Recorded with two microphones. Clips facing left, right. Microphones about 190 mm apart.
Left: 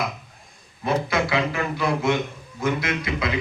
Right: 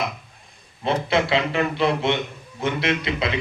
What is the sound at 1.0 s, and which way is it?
A man's voice, 25° right (ahead or behind).